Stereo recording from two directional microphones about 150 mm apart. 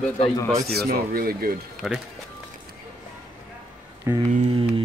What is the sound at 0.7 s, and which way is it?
Speech, 90° right.